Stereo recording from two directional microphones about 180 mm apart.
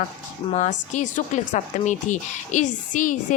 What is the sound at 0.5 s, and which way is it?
Speech, 40° left (ahead or behind).